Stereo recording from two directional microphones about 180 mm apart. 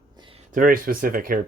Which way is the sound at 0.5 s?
50° right (ahead or behind).